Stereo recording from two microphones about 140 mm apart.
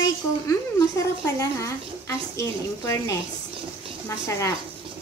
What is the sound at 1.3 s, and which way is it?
A woman's voice, 20° left (ahead or behind).